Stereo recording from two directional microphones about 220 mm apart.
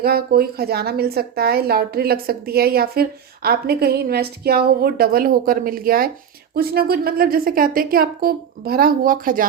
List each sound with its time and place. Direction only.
0.0 s a woman's voice: 45° right (ahead or behind)